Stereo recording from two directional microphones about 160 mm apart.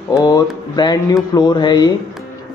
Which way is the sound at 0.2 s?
25° left (ahead or behind).